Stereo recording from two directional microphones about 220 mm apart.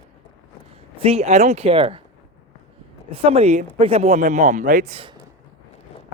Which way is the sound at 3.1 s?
25° right (ahead or behind).